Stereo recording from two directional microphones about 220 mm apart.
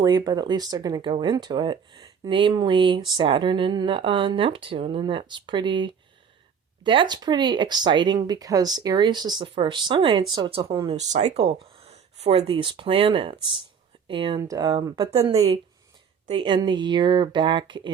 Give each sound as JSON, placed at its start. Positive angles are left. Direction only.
{"t": 0.0, "sound": "speech", "side_deg": -20}
{"t": 10.9, "sound": "speech", "side_deg": -30}